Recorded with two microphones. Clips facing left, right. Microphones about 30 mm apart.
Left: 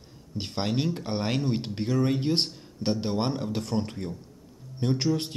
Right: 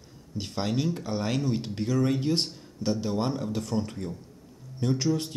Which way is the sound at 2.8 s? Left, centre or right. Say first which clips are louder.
Left 1 dB; left.